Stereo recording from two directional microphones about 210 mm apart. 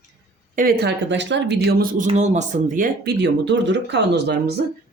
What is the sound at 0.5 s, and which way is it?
Speech, 45° right (ahead or behind).